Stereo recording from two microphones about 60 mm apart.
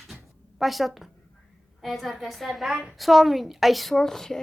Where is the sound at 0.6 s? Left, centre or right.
Centre.